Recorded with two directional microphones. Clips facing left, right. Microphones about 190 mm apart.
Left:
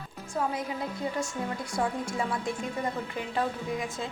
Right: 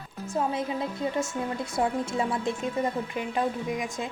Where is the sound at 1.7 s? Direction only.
25° right (ahead or behind).